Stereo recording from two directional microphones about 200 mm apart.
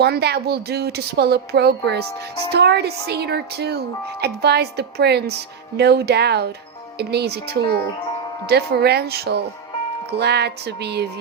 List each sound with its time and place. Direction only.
0.0 s a woman's voice: 55° right (ahead or behind)